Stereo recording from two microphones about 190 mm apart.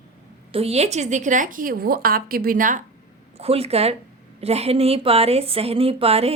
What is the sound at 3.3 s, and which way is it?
A woman's voice, 30° right (ahead or behind).